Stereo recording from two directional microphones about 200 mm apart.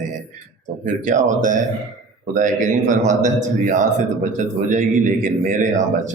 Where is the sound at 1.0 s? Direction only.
40° right (ahead or behind).